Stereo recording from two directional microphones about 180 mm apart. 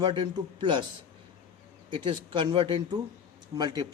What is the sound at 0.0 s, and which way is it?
Speech, 25° right (ahead or behind).